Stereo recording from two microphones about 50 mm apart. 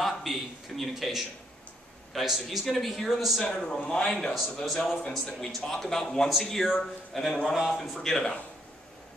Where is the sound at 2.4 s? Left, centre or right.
Centre.